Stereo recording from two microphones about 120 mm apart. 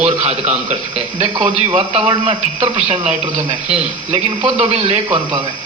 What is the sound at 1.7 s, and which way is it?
A man's voice, 55° right (ahead or behind).